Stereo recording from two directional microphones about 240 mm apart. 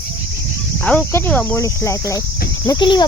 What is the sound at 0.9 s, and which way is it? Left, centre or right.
Speech, centre.